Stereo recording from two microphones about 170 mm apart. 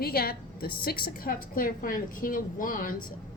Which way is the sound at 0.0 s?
65° left (ahead or behind).